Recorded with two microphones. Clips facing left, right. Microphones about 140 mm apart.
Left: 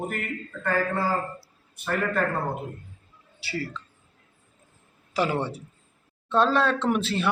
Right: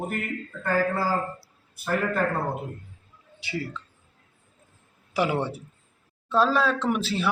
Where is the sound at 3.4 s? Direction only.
15° right (ahead or behind).